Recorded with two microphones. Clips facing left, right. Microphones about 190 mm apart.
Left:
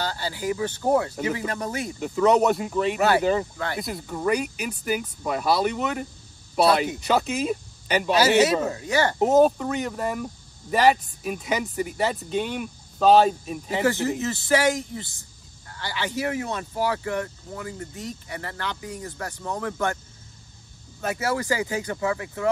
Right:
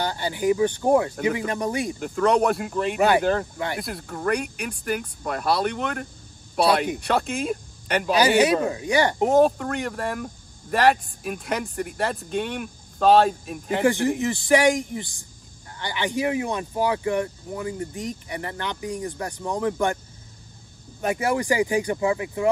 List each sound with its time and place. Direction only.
0.0 s speech: 20° right (ahead or behind)
2.0 s speech: 5° left (ahead or behind)
3.5 s speech: 15° right (ahead or behind)
3.8 s speech: centre (ahead or behind)
8.5 s speech: 10° right (ahead or behind)
9.2 s speech: centre (ahead or behind)
13.8 s speech: 15° right (ahead or behind)
21.0 s speech: 20° right (ahead or behind)